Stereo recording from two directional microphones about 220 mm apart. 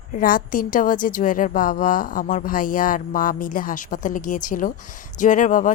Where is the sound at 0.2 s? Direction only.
40° left (ahead or behind).